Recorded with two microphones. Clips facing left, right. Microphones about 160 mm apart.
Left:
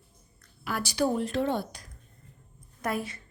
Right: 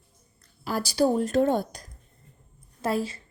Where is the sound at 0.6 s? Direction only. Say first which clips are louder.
Right 4 dB; 35° right (ahead or behind).